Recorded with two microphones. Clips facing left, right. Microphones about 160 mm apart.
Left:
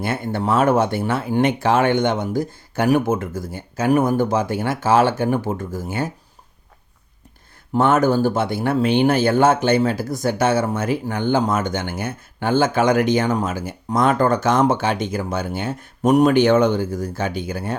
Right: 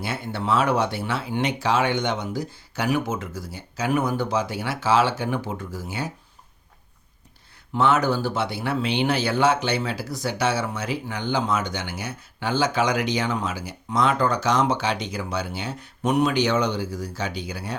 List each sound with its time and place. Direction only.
0.0 s speech: 50° left (ahead or behind)
7.7 s speech: 45° left (ahead or behind)